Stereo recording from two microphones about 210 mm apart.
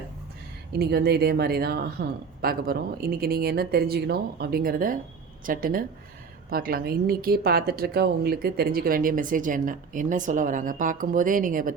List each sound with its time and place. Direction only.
0.7 s a woman's voice: 50° right (ahead or behind)